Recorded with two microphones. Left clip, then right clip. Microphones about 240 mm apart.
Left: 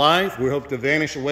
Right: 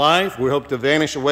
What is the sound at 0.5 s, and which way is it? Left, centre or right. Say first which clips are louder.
Speech: right 3 dB; right.